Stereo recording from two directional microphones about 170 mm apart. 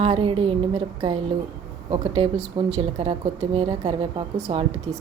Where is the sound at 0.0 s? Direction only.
35° right (ahead or behind).